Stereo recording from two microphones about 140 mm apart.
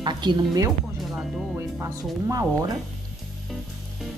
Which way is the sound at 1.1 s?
5° right (ahead or behind).